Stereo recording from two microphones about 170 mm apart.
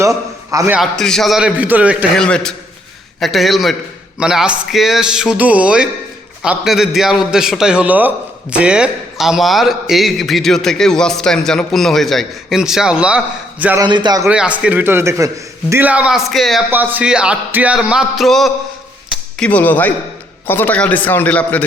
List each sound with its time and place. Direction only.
0.8 s a man's voice: 5° left (ahead or behind)
2.1 s a man's voice: 5° left (ahead or behind)
13.8 s a man's voice: 25° right (ahead or behind)
14.3 s a man's voice: 5° right (ahead or behind); by 21.7 s 10° left (ahead or behind)